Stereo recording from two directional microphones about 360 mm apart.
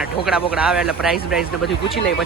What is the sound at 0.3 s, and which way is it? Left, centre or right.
Speech, centre.